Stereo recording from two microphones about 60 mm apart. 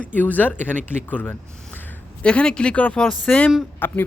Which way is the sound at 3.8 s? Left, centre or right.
Left.